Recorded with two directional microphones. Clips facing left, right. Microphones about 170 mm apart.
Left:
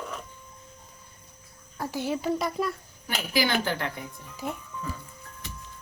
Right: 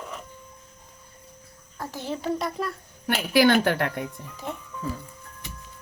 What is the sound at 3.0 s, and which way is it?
A woman's voice, 60° right (ahead or behind).